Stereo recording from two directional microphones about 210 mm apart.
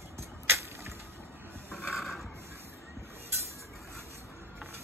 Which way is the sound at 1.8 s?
Centre (ahead or behind).